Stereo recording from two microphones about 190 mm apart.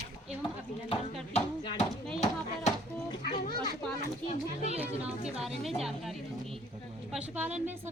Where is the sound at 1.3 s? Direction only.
35° left (ahead or behind).